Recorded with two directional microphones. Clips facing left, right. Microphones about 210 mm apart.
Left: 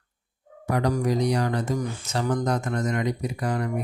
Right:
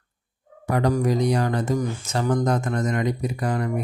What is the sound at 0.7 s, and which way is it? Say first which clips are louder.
Speech: right 2 dB; 50° right (ahead or behind).